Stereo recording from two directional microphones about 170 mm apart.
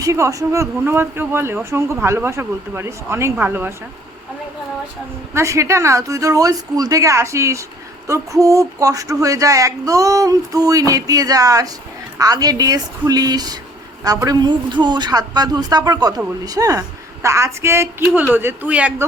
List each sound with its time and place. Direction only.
0.0 s speech: 20° right (ahead or behind)
5.3 s speech: 15° right (ahead or behind)